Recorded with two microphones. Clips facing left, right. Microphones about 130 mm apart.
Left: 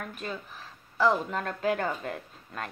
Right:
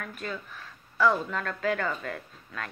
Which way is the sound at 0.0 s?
30° left (ahead or behind).